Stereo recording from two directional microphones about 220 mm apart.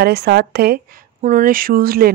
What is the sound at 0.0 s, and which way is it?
Speech, 50° right (ahead or behind).